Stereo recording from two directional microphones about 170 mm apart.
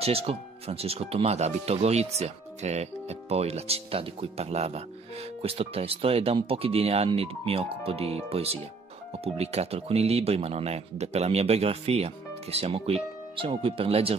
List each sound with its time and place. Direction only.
0.0 s speech: 35° right (ahead or behind)